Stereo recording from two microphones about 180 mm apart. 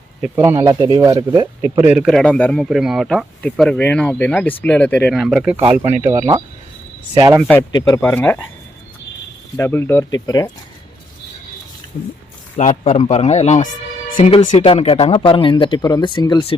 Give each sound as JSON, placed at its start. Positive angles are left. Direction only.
{"t": 0.2, "sound": "speech", "side_deg": -10}
{"t": 1.7, "sound": "speech", "side_deg": -10}
{"t": 5.9, "sound": "speech", "side_deg": -40}
{"t": 7.1, "sound": "speech", "side_deg": -25}
{"t": 7.7, "sound": "speech", "side_deg": 20}
{"t": 9.6, "sound": "speech", "side_deg": 15}
{"t": 11.9, "sound": "a man's voice", "side_deg": 45}